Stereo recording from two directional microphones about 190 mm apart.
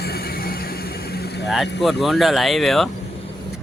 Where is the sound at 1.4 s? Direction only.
Centre (ahead or behind).